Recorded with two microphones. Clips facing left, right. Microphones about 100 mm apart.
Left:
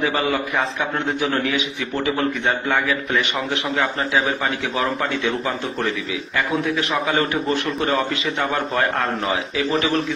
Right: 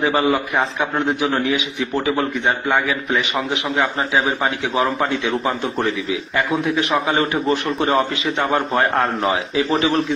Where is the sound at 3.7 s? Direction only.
35° right (ahead or behind).